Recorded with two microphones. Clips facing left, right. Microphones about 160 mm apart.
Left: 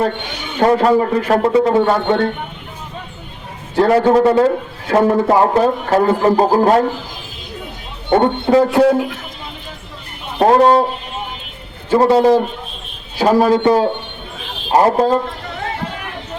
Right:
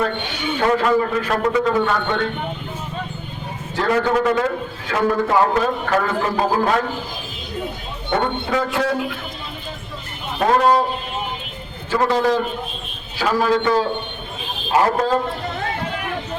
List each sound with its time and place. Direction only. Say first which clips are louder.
0.6 s a man's voice: left 5 dB; 35° left (ahead or behind)
3.8 s a man's voice: left 7 dB; 35° left (ahead or behind)
8.1 s a man's voice: left 8 dB; 35° left (ahead or behind)
10.4 s a man's voice: left 5 dB; 35° left (ahead or behind)
11.9 s a man's voice: left 7 dB; 35° left (ahead or behind)